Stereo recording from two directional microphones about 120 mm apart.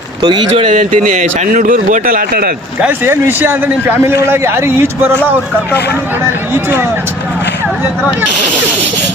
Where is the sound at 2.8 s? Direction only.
15° right (ahead or behind).